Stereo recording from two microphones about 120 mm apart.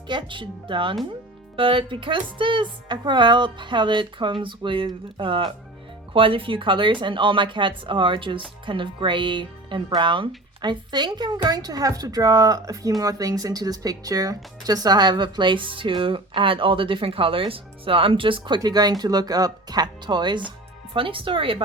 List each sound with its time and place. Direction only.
0.1 s speech: 40° right (ahead or behind)